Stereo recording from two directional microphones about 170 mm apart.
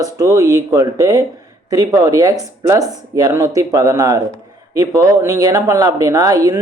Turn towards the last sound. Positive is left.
turn(degrees=-20)  # may be behind; listen again after turning